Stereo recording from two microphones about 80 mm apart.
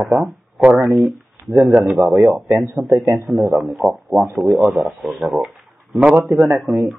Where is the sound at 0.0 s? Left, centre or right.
Centre.